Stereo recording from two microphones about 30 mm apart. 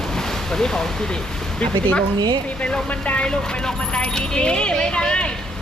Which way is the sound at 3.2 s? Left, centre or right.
Left.